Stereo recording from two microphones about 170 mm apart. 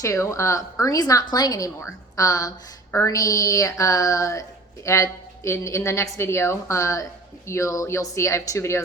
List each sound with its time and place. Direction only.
0.0 s a woman's voice: 15° left (ahead or behind)